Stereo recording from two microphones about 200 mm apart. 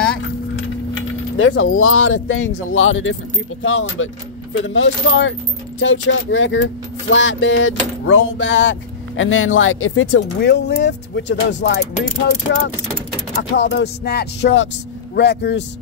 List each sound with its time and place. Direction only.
1.4 s speech: 75° left (ahead or behind)
10.5 s speech: 55° left (ahead or behind)
13.4 s speech: 60° left (ahead or behind)